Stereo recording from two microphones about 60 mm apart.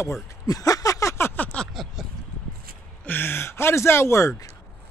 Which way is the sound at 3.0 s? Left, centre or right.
Left.